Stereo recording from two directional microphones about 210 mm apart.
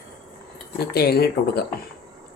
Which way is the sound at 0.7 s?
50° left (ahead or behind).